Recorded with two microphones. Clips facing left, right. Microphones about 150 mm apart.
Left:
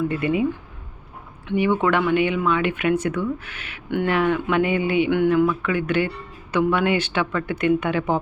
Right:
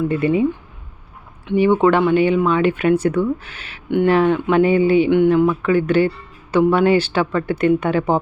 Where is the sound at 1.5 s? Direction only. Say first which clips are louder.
Right 6 dB; 30° right (ahead or behind).